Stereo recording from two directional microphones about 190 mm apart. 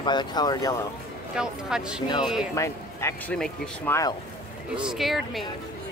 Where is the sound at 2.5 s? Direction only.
15° left (ahead or behind).